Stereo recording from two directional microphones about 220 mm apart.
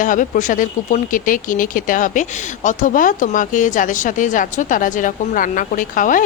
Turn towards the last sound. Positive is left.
turn(degrees=35)  # may be behind; listen again after turning